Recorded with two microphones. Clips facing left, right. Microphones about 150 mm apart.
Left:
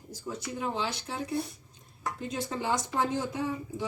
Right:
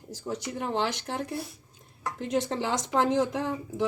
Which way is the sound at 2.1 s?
80° right.